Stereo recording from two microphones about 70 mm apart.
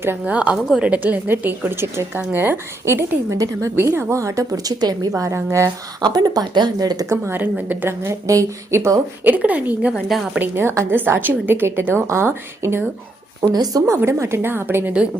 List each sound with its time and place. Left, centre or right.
0.3 s a woman's voice: centre; by 5.2 s right
5.2 s a woman's voice: right
6.0 s speech: right
7.7 s a woman's voice: right
8.3 s a woman's voice: right
9.2 s a woman's voice: right
10.4 s a woman's voice: right
13.4 s speech: right
13.8 s a woman's voice: right